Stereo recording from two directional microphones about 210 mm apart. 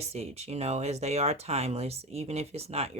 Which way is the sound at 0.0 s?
30° right (ahead or behind).